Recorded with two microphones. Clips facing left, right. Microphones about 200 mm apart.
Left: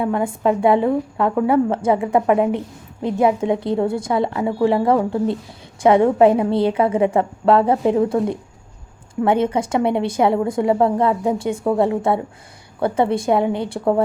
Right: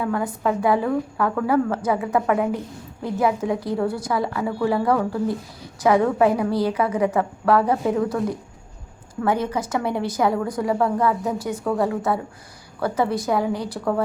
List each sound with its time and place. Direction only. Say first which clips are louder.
0.0 s a woman's voice: left 4 dB; 25° left (ahead or behind)